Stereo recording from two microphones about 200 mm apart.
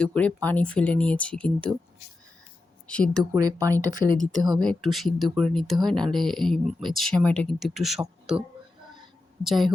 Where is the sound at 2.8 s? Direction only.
5° left (ahead or behind).